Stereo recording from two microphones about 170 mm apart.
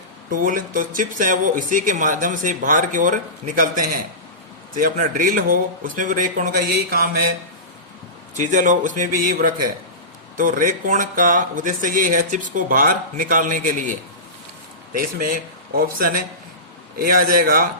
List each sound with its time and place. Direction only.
0.3 s speech: 55° right (ahead or behind)
4.8 s speech: 55° right (ahead or behind)
8.4 s a man's voice: 45° right (ahead or behind)